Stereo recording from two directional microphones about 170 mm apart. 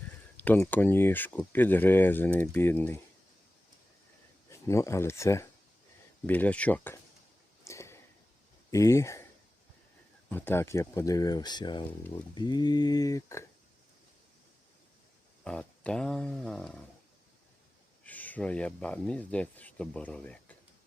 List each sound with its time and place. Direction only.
0.3 s speech: 10° left (ahead or behind)
4.4 s speech: 15° left (ahead or behind)
7.6 s a sound: 15° left (ahead or behind)
8.7 s speech: 20° left (ahead or behind)
10.2 s speech: 10° left (ahead or behind)
15.4 s speech: 5° left (ahead or behind)
18.0 s speech: 10° left (ahead or behind)